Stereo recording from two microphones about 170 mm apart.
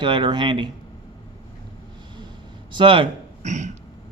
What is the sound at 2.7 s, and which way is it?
Speech, 30° right (ahead or behind).